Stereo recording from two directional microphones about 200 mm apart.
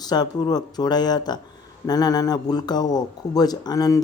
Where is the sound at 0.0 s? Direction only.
20° left (ahead or behind).